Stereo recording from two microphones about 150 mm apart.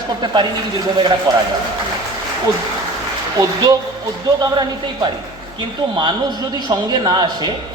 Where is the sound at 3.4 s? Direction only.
25° right (ahead or behind).